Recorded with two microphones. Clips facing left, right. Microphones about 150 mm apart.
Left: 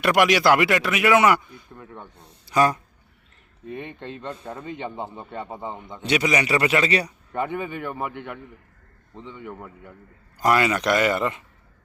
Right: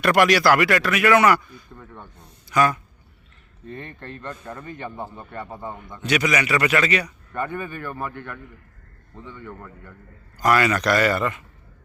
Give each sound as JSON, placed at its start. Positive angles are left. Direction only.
{"t": 0.0, "sound": "a man's voice", "side_deg": 15}
{"t": 1.7, "sound": "snake", "side_deg": 10}
{"t": 2.5, "sound": "speech", "side_deg": 30}
{"t": 3.7, "sound": "a man's voice", "side_deg": 15}
{"t": 7.3, "sound": "a man's voice", "side_deg": 20}